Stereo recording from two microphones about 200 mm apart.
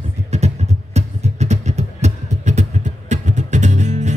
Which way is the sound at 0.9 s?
35° right (ahead or behind).